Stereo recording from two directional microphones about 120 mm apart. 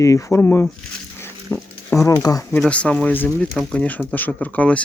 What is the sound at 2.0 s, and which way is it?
Speech, 30° left (ahead or behind).